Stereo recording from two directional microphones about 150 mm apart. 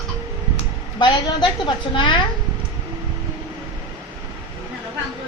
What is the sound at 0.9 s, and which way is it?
A woman's voice, 30° left (ahead or behind).